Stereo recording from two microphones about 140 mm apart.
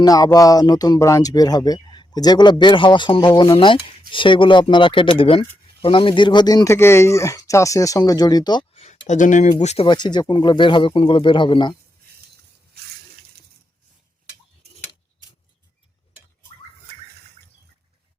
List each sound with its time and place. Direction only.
0.0 s speech: 25° left (ahead or behind)
8.7 s speech: 55° left (ahead or behind)
9.8 s speech: 35° left (ahead or behind)